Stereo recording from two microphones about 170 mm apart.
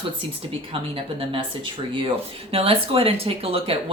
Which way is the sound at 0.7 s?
30° right (ahead or behind).